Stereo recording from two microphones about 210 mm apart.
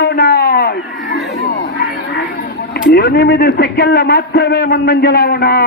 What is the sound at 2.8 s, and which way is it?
A man's voice, 45° left (ahead or behind).